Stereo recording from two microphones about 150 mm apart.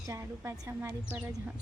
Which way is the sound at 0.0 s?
20° right (ahead or behind).